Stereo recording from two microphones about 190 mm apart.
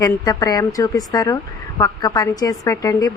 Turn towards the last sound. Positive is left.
turn(degrees=20)  # may be behind; listen again after turning